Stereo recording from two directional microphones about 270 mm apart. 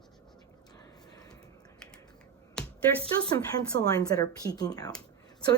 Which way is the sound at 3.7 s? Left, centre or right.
Right.